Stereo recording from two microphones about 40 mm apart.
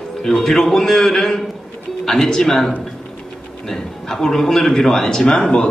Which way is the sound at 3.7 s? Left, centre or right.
Centre.